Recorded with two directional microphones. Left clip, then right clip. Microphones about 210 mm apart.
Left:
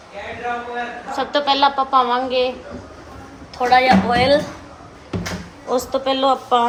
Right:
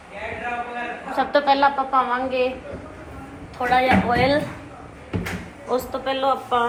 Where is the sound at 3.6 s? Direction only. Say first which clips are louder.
Left 4 dB; 25° left (ahead or behind).